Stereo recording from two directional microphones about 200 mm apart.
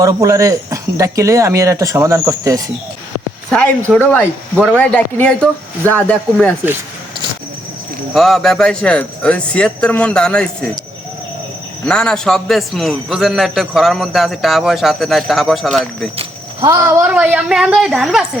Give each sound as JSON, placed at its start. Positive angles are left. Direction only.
{"t": 0.0, "sound": "speech", "side_deg": -15}
{"t": 3.9, "sound": "a man's voice", "side_deg": 10}
{"t": 8.1, "sound": "a man's voice", "side_deg": 0}
{"t": 11.9, "sound": "a man's voice", "side_deg": 5}
{"t": 16.1, "sound": "cricket", "side_deg": -25}
{"t": 16.7, "sound": "a man's voice", "side_deg": -10}